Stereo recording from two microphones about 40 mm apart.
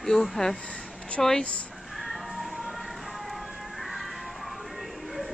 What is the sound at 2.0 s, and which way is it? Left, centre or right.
Music, centre.